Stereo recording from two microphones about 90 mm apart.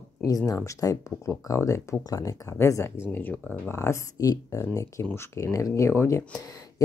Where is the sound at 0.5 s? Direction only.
35° left (ahead or behind).